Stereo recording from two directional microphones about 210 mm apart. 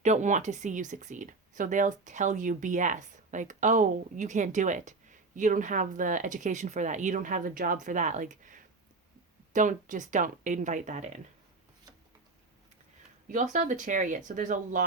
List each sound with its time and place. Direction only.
0.0 s speech: 35° right (ahead or behind)
13.2 s speech: 35° right (ahead or behind)